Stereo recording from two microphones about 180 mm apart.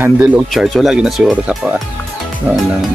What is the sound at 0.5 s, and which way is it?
Speech, centre (ahead or behind).